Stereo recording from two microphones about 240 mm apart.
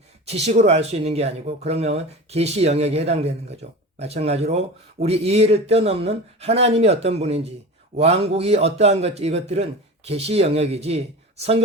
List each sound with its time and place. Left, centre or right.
0.3 s speech: right